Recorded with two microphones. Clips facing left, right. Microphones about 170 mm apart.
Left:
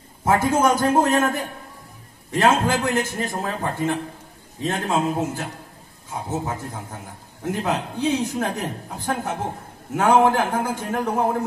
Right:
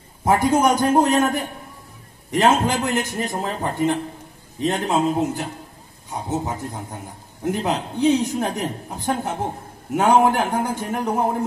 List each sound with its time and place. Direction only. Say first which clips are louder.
0.2 s a woman's voice: right 1 dB; 15° right (ahead or behind)